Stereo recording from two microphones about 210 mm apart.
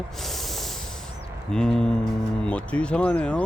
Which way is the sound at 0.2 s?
Centre (ahead or behind).